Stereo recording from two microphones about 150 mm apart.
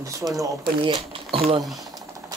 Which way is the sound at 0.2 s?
25° right (ahead or behind).